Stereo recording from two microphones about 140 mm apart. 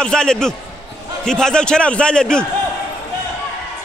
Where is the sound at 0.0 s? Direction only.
5° left (ahead or behind).